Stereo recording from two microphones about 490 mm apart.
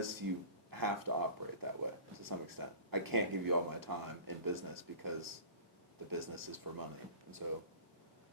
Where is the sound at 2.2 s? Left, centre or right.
Right.